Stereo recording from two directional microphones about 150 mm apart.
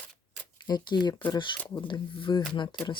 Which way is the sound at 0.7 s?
30° left (ahead or behind).